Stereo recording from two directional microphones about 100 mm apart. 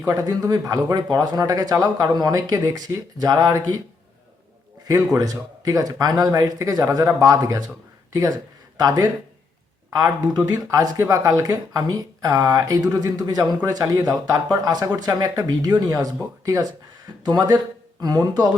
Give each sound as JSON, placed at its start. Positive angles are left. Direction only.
{"t": 0.2, "sound": "speech", "side_deg": -35}
{"t": 4.9, "sound": "speech", "side_deg": -40}
{"t": 10.7, "sound": "speech", "side_deg": -35}
{"t": 17.2, "sound": "speech", "side_deg": -45}